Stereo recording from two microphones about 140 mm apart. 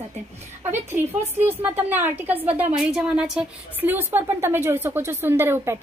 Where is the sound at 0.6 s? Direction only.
15° right (ahead or behind).